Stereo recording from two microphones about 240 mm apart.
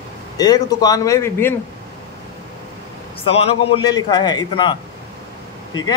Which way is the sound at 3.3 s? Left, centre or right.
Left.